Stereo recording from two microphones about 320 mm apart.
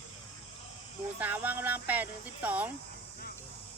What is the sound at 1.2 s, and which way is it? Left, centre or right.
Speech, centre.